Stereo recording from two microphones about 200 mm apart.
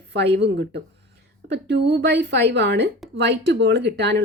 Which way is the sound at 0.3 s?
60° right (ahead or behind).